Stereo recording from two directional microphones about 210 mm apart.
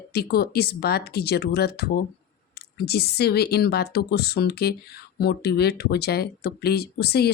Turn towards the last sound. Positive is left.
turn(degrees=50)  # may be behind; listen again after turning